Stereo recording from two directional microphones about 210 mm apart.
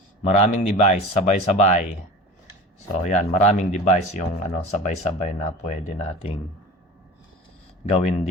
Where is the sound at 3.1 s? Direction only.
35° left (ahead or behind).